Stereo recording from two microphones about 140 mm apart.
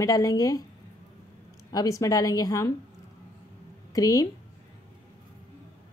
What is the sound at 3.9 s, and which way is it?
Speech, 25° left (ahead or behind).